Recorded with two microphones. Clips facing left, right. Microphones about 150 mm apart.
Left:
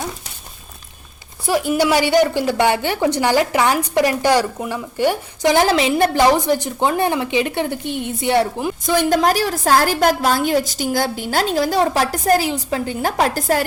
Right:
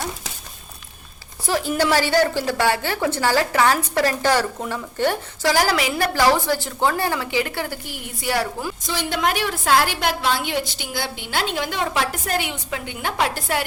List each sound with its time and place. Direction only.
1.5 s a woman's voice: 10° left (ahead or behind)
8.9 s a woman's voice: 45° left (ahead or behind)